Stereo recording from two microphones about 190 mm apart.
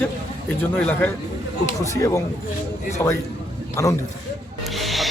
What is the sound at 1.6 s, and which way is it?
Speech, 15° left (ahead or behind).